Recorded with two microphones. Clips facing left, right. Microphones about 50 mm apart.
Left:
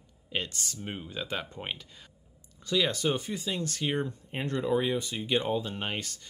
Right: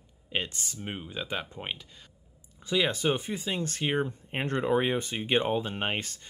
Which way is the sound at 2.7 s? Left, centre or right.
Right.